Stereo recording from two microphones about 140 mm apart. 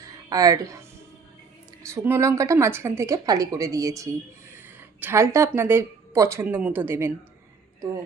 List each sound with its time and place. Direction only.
0.3 s a woman's voice: 25° right (ahead or behind)
1.9 s a woman's voice: 20° right (ahead or behind)
4.5 s a sound: 15° right (ahead or behind)
5.5 s speech: 15° right (ahead or behind)